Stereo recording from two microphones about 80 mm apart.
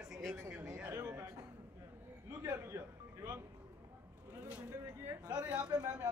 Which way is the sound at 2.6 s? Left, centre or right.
Right.